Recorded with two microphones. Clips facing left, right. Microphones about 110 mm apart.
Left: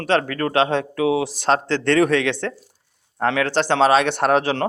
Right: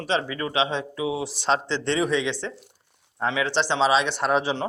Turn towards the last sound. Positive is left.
turn(degrees=60)  # may be behind; listen again after turning